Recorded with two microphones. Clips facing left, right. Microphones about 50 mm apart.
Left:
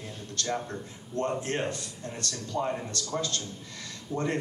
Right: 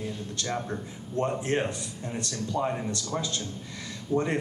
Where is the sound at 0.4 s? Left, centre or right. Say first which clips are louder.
Left 1 dB; centre.